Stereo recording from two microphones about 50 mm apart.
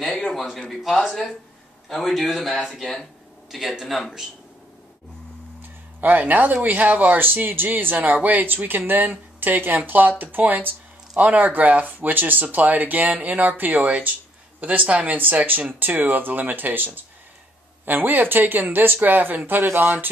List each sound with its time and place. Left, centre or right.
0.3 s speech: centre
5.6 s speech: right